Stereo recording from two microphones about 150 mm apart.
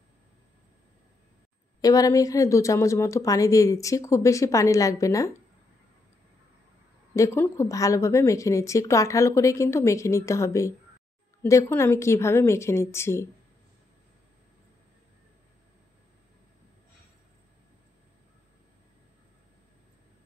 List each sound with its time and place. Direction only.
1.8 s speech: 25° left (ahead or behind)
7.2 s a woman's voice: 15° left (ahead or behind)